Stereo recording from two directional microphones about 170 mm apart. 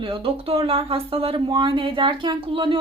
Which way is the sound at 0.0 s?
30° right (ahead or behind).